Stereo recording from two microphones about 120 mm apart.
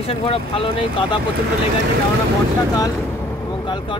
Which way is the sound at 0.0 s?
50° left (ahead or behind).